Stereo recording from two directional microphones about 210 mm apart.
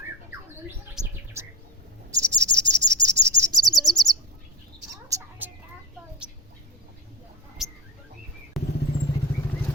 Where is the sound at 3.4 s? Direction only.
Centre (ahead or behind).